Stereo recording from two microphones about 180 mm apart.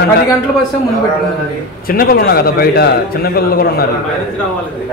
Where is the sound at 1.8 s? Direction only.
55° left (ahead or behind).